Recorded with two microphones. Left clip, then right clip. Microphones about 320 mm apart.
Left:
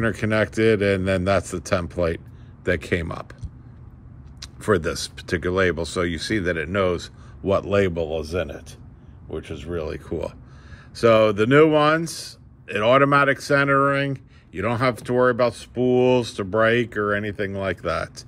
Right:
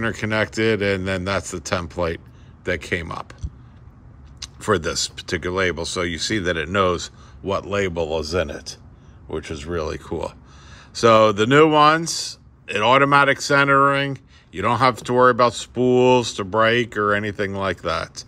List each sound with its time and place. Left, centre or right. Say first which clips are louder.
0.0 s speech: even; centre
7.4 s speech: left 2 dB; centre
8.0 s speech: right 3 dB; centre